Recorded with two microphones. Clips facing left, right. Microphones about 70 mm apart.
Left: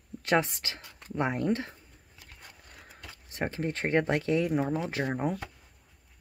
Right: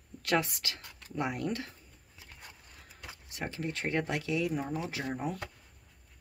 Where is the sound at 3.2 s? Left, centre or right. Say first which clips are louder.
Left 5 dB; left.